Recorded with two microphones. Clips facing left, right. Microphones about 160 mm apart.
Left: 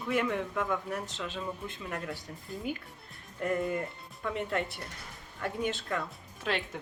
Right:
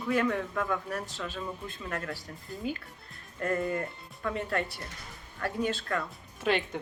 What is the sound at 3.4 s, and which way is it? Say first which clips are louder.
A man's voice: right 1 dB; 15° left (ahead or behind).